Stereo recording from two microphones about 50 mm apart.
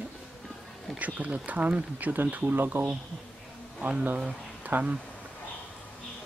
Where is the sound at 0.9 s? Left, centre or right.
Right.